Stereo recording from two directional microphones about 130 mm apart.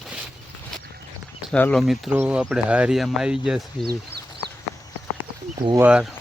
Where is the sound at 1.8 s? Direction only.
Centre (ahead or behind).